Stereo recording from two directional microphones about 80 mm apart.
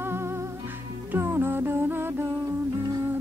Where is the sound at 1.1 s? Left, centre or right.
Right.